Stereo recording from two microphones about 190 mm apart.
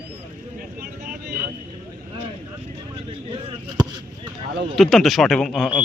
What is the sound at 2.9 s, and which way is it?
Vehicle, 25° right (ahead or behind).